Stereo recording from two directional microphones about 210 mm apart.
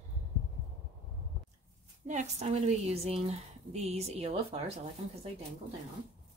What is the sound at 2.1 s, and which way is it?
A woman's voice, 35° right (ahead or behind).